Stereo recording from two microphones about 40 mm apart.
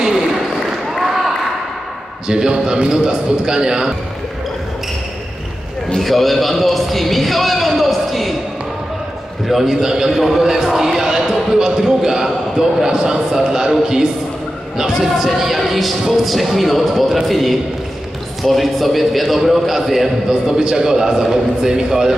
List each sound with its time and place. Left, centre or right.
1.0 s basketball bounce: centre
2.2 s a man's voice: centre
5.9 s a man's voice: centre
9.5 s a man's voice: centre